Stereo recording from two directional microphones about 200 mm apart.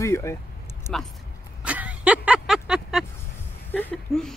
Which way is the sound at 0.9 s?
5° left (ahead or behind).